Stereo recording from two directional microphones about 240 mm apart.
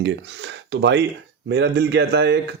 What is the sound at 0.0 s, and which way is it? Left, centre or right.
Speech, right.